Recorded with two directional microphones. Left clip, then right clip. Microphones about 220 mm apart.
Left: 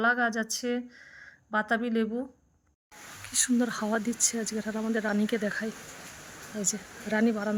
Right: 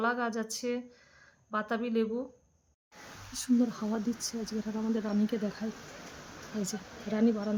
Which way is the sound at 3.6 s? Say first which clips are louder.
Left 3 dB; 20° left (ahead or behind).